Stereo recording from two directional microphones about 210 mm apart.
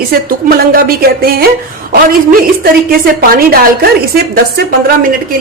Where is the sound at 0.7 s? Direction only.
45° right (ahead or behind).